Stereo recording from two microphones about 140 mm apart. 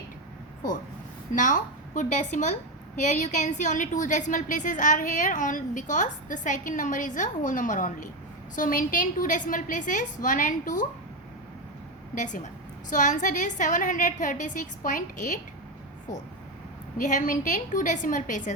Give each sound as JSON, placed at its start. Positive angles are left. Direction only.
{"t": 1.4, "sound": "a woman's voice", "side_deg": 65}
{"t": 12.1, "sound": "a woman's voice", "side_deg": 65}
{"t": 17.0, "sound": "a woman's voice", "side_deg": 65}